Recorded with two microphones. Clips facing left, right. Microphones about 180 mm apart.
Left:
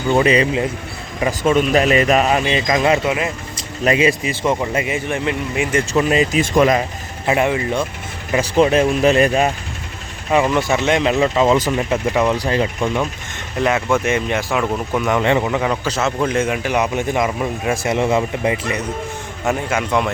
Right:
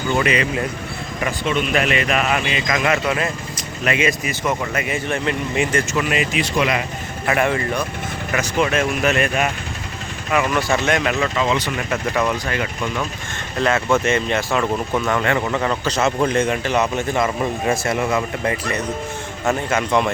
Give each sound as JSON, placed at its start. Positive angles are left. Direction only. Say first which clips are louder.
{"t": 0.1, "sound": "speech", "louder": "left 5 dB", "side_deg": 30}
{"t": 1.5, "sound": "speech", "louder": "left 6 dB", "side_deg": 40}
{"t": 3.1, "sound": "a man's voice", "louder": "left 1 dB", "side_deg": 15}
{"t": 3.8, "sound": "a man's voice", "louder": "left 4 dB", "side_deg": 30}
{"t": 5.9, "sound": "speech", "louder": "left 5 dB", "side_deg": 30}
{"t": 6.4, "sound": "speech", "louder": "left 7 dB", "side_deg": 45}
{"t": 7.3, "sound": "speech", "louder": "left 2 dB", "side_deg": 20}
{"t": 11.9, "sound": "speech", "louder": "left 1 dB", "side_deg": 20}
{"t": 13.6, "sound": "a man's voice", "louder": "left 1 dB", "side_deg": 15}
{"t": 15.5, "sound": "a man's voice", "louder": "left 1 dB", "side_deg": 10}
{"t": 19.5, "sound": "a man's voice", "louder": "even", "side_deg": 5}